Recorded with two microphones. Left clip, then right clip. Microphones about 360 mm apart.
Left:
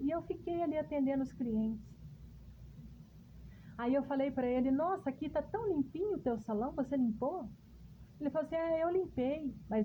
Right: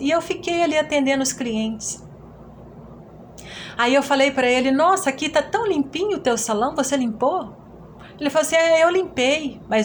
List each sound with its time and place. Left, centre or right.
0.0 s a woman's voice: left
3.8 s a woman's voice: left